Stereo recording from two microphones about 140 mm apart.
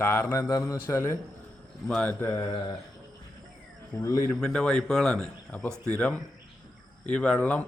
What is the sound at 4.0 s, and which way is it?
Speech, 25° left (ahead or behind).